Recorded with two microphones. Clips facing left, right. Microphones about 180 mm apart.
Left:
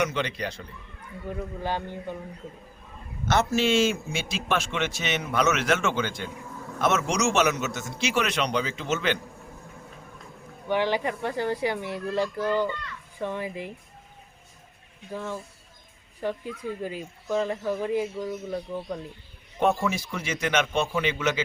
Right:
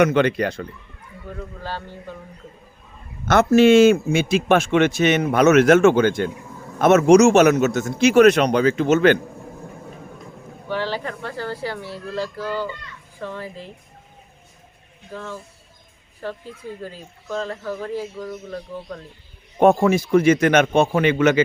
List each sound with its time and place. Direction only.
0.0 s speech: 55° right (ahead or behind)
1.4 s speech: 15° left (ahead or behind)
3.2 s a man's voice: 55° right (ahead or behind)
10.7 s speech: 15° left (ahead or behind)
15.1 s speech: 15° left (ahead or behind)
19.5 s a man's voice: 50° right (ahead or behind)